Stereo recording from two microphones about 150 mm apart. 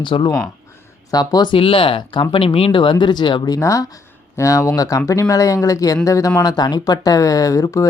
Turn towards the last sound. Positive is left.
turn(degrees=20)  # may be behind; listen again after turning